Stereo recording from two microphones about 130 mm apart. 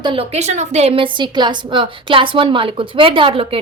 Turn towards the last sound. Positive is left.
turn(degrees=-45)  # may be behind; listen again after turning